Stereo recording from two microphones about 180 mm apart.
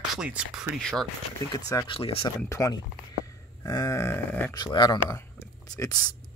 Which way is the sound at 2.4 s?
15° left (ahead or behind).